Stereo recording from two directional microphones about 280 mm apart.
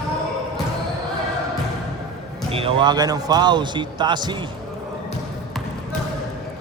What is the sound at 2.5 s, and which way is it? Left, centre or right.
A man's voice, centre.